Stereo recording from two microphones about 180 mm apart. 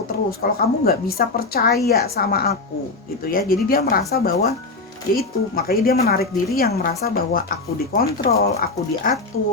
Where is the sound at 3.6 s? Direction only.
55° left (ahead or behind).